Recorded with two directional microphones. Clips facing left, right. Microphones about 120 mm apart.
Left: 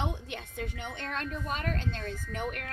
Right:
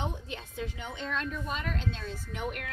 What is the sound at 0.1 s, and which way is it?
A woman's voice, 70° left (ahead or behind).